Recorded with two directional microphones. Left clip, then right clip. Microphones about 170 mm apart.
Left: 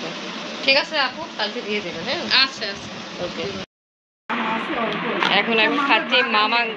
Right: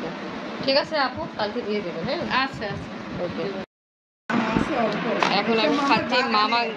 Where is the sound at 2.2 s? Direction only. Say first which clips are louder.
Left 8 dB; 50° right (ahead or behind).